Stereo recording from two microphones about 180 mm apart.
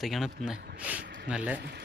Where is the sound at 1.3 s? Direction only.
5° right (ahead or behind).